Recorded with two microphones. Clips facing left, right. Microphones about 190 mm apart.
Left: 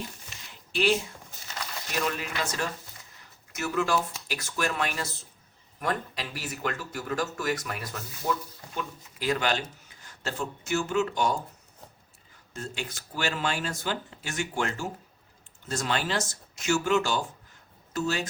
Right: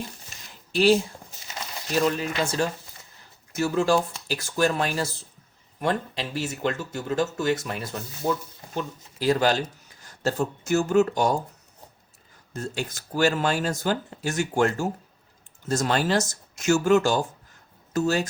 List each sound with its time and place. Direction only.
0.3 s a sound: 45° right (ahead or behind)
0.7 s speech: 35° right (ahead or behind)
12.5 s speech: 40° right (ahead or behind)